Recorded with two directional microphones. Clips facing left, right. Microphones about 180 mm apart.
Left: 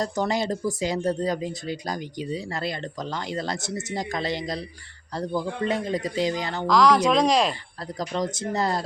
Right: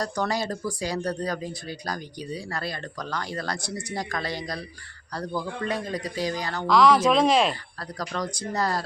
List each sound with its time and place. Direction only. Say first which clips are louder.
0.0 s speech: left 2 dB; 20° left (ahead or behind)
6.7 s speech: even; centre (ahead or behind)
7.9 s speech: left 3 dB; 20° left (ahead or behind)